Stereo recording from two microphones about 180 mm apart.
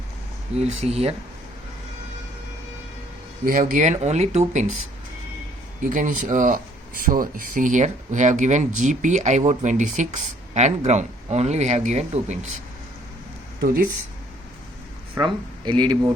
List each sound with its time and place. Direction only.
0.5 s speech: 35° right (ahead or behind)
3.4 s speech: 50° right (ahead or behind)
5.8 s speech: 45° right (ahead or behind)
15.2 s speech: 25° right (ahead or behind)